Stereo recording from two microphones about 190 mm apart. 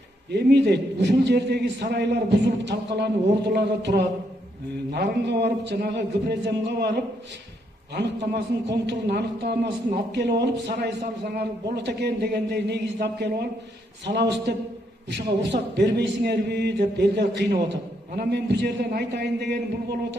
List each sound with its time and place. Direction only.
0.3 s speech: 65° right (ahead or behind)